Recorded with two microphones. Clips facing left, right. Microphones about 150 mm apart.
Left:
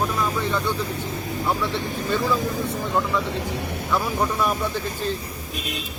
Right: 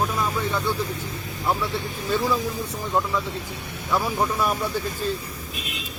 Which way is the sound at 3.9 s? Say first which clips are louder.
Right 1 dB; 5° right (ahead or behind).